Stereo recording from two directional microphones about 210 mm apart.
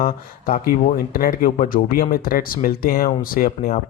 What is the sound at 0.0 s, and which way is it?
Speech, 45° left (ahead or behind).